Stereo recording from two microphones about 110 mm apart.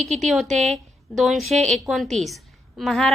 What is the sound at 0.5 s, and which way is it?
Speech, 90° right.